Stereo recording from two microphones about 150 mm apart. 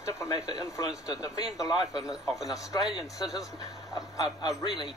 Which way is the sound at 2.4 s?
25° left (ahead or behind).